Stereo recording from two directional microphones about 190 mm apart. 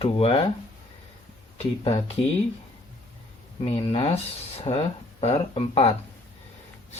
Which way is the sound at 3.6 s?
30° left (ahead or behind).